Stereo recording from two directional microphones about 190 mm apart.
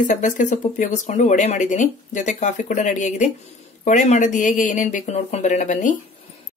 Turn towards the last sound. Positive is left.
turn(degrees=40)  # may be behind; listen again after turning